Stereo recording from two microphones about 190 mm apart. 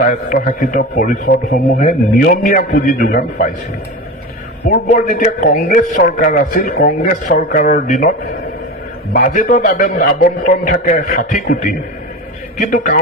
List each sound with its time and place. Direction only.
0.0 s a man's voice: 45° left (ahead or behind)
4.6 s a man's voice: 45° left (ahead or behind)
9.1 s a man's voice: 45° left (ahead or behind)
12.5 s a man's voice: 45° left (ahead or behind)